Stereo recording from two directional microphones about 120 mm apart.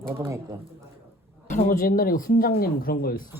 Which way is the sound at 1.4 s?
90° left.